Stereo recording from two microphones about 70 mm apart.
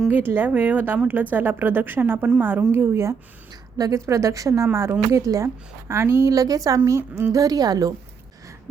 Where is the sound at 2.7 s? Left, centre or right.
Right.